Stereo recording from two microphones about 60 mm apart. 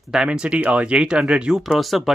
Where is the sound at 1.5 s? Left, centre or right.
Centre.